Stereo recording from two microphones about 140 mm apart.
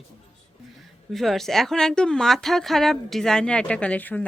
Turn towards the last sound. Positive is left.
turn(degrees=10)  # may be behind; listen again after turning